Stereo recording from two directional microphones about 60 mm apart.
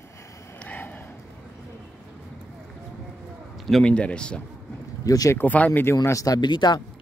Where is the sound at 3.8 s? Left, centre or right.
Centre.